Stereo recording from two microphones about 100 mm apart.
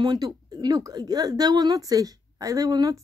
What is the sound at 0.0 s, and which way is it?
Speech, 45° right (ahead or behind).